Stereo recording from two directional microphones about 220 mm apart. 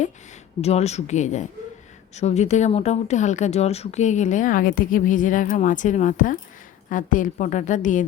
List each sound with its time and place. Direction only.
0.6 s speech: 30° left (ahead or behind)